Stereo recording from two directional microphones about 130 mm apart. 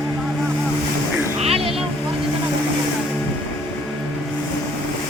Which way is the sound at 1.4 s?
50° right (ahead or behind).